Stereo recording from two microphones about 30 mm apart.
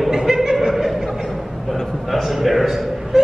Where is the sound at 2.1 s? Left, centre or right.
Centre.